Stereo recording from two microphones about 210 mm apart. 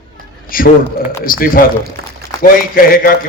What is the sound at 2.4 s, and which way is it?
Speech, 45° left (ahead or behind).